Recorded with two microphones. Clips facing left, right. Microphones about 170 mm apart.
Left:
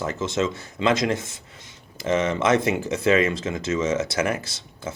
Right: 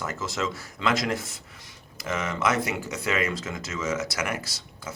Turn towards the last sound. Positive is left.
turn(degrees=25)  # may be behind; listen again after turning